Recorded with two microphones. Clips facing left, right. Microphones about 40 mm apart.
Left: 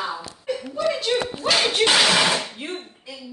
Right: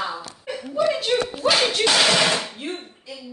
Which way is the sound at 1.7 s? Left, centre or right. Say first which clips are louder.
Left 1 dB; left.